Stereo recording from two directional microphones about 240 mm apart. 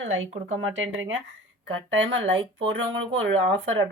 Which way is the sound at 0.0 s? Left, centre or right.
Right.